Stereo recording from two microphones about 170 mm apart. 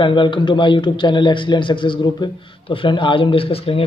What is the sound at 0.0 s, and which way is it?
A man's voice, 30° left (ahead or behind).